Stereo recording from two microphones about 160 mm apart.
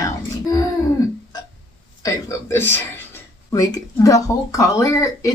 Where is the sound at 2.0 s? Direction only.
15° left (ahead or behind).